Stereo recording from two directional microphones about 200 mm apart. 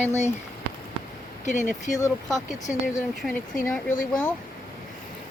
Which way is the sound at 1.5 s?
40° left (ahead or behind).